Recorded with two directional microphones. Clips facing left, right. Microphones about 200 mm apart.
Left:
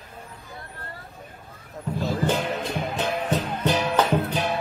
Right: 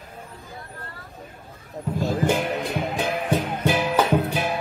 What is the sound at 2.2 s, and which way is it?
Music, 15° right (ahead or behind).